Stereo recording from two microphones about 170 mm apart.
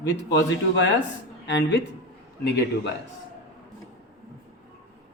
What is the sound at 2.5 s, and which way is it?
Speech, 75° left (ahead or behind).